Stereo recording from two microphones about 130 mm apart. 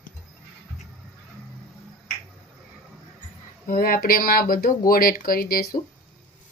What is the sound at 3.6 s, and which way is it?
Speech, 90° left.